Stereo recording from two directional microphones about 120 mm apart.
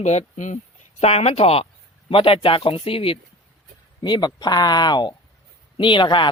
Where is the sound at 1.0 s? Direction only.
60° left (ahead or behind).